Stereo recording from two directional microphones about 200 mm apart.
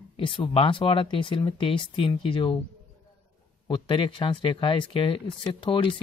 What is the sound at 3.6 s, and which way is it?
Speech, 25° left (ahead or behind).